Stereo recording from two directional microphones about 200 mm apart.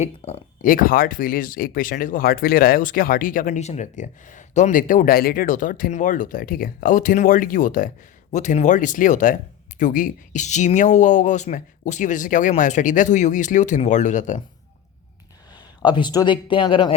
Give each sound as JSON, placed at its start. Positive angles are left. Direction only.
{"t": 0.0, "sound": "speech", "side_deg": 40}
{"t": 15.5, "sound": "speech", "side_deg": 20}